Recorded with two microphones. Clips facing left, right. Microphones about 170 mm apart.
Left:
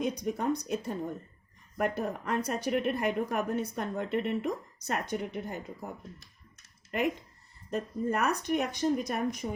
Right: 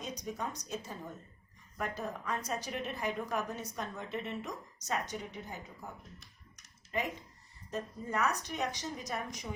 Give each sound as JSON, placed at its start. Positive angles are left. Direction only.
{"t": 0.0, "sound": "speech", "side_deg": 60}
{"t": 7.7, "sound": "speech", "side_deg": 60}